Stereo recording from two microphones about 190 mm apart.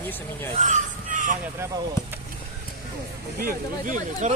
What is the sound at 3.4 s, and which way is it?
Speech, 45° right (ahead or behind).